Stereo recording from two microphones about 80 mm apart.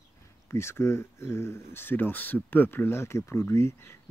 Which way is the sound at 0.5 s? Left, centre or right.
Left.